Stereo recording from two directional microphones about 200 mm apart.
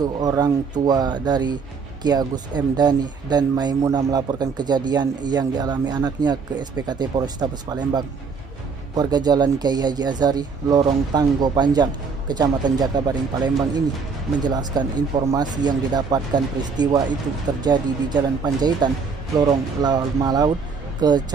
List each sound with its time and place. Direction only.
0.0 s speech: 20° right (ahead or behind)